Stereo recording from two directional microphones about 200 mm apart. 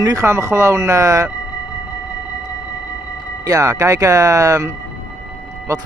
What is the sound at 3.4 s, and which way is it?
Speech, 15° right (ahead or behind).